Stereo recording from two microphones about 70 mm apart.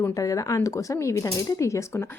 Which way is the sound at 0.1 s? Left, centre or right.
Left.